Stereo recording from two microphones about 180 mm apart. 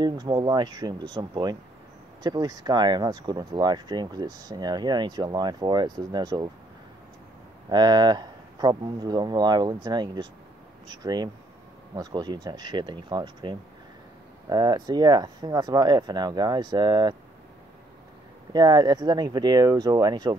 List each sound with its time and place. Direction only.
0.0 s speech: 25° right (ahead or behind)
7.7 s speech: 25° right (ahead or behind)
18.5 s speech: 20° right (ahead or behind)